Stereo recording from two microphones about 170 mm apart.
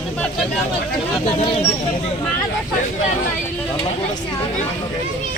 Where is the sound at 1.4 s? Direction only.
35° left (ahead or behind).